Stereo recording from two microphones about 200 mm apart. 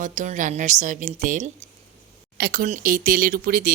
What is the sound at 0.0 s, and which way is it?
Speech, 40° right (ahead or behind).